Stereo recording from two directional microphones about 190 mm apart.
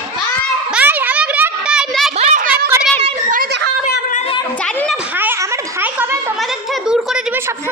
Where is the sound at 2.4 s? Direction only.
10° right (ahead or behind).